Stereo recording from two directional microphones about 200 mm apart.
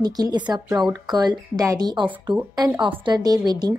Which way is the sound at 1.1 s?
20° right (ahead or behind).